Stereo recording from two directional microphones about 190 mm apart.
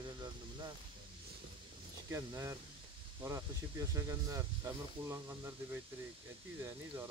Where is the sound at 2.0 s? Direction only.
15° right (ahead or behind).